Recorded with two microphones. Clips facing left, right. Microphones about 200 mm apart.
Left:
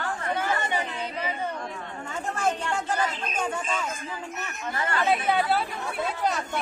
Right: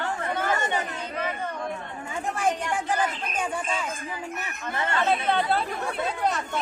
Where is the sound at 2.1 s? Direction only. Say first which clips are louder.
Right 1 dB; 10° right (ahead or behind).